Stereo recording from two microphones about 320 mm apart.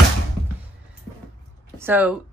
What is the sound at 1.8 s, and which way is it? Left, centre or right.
Speech, centre.